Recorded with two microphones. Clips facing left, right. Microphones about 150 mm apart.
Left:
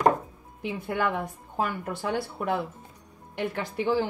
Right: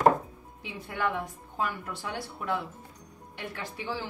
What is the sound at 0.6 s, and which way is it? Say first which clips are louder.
Speech: left 4 dB; 50° left (ahead or behind).